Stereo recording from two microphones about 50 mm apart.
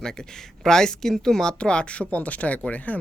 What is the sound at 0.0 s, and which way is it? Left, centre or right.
Speech, centre.